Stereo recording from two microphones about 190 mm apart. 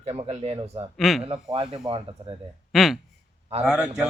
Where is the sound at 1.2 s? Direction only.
30° right (ahead or behind).